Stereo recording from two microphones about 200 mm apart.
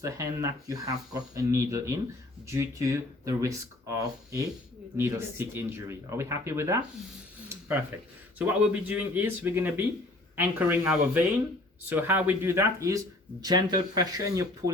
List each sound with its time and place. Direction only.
0.0 s speech: 15° right (ahead or behind)
8.4 s speech: 10° right (ahead or behind)
14.6 s speech: 50° right (ahead or behind)